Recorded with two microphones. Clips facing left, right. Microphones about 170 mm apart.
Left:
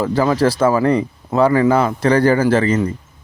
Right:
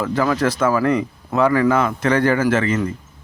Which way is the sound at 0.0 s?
30° left (ahead or behind).